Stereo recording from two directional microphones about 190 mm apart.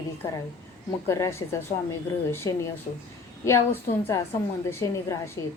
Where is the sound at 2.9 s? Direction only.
40° left (ahead or behind).